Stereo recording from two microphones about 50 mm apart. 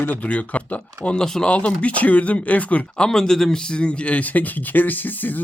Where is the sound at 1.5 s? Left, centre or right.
Left.